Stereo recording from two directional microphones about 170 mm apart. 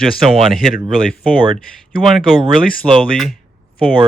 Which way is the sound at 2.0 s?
Centre (ahead or behind).